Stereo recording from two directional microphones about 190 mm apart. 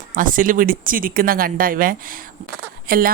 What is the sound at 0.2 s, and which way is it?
Speech, 45° right (ahead or behind).